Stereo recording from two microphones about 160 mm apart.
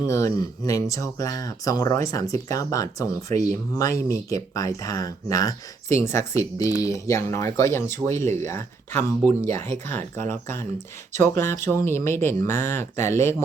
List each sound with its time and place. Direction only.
0.0 s speech: 20° left (ahead or behind)
9.4 s speech: 45° right (ahead or behind)
9.6 s speech: 15° left (ahead or behind)
11.3 s speech: 15° left (ahead or behind)